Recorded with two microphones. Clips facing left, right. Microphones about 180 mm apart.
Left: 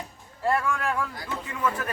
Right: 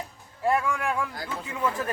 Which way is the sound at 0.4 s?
15° right (ahead or behind).